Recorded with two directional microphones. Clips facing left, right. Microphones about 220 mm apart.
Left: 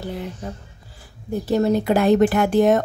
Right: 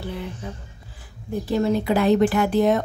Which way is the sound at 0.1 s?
45° left (ahead or behind).